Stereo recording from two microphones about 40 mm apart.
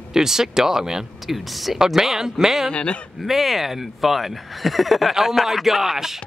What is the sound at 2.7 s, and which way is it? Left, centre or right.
Speech, left.